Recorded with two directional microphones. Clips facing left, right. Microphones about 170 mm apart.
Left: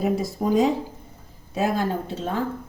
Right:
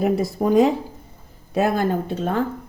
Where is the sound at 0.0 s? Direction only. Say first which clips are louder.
Right 3 dB; 60° right (ahead or behind).